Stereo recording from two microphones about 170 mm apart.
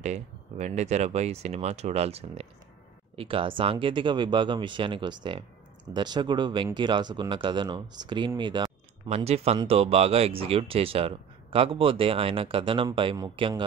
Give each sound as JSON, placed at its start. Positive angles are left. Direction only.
{"t": 0.0, "sound": "speech", "side_deg": -45}